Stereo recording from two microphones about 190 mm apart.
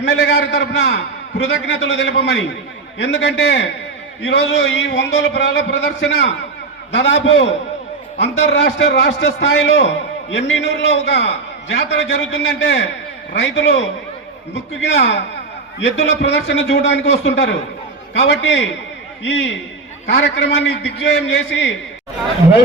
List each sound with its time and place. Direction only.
0.0 s a man's voice: 65° left (ahead or behind)